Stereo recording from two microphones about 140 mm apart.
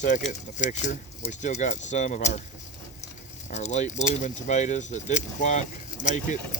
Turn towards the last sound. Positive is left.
turn(degrees=65)  # may be behind; listen again after turning